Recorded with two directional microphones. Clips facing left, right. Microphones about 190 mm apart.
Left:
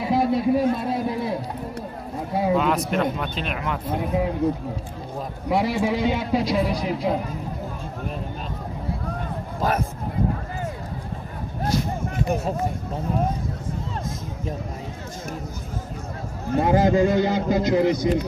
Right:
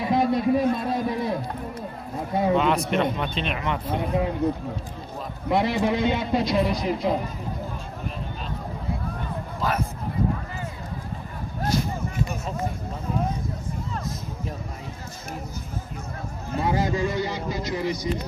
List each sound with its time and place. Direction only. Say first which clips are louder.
0.0 s a sound: left 1 dB; 5° left (ahead or behind)
2.3 s speech: even; 5° left (ahead or behind)
5.5 s a man's voice: even; 5° left (ahead or behind)
9.6 s a man's voice: left 3 dB; 45° left (ahead or behind)
16.5 s a man's voice: left 6 dB; 50° left (ahead or behind)